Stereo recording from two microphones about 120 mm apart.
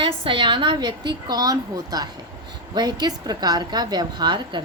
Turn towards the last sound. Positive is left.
turn(degrees=-40)  # may be behind; listen again after turning